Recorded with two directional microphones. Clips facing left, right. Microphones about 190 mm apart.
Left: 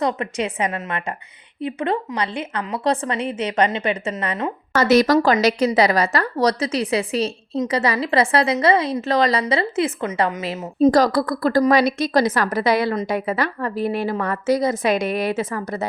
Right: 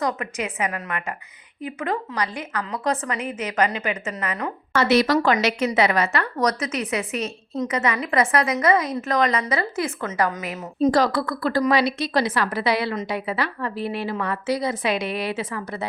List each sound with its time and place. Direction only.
0.0 s a woman's voice: 30° left (ahead or behind)
4.7 s a woman's voice: 40° left (ahead or behind)
10.9 s a woman's voice: 40° left (ahead or behind)